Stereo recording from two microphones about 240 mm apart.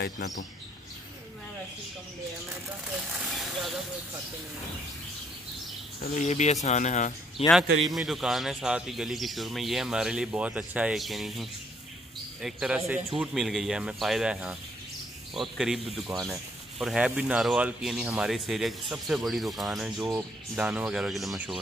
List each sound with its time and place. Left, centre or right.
3.1 s vehicle: centre
6.1 s speech: left
7.8 s speech: centre